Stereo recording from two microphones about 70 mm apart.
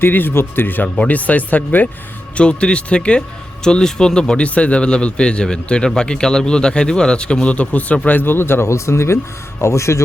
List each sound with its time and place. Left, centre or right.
0.0 s a man's voice: left